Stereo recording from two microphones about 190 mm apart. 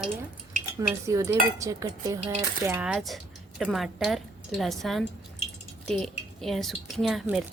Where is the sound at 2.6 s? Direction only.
10° right (ahead or behind).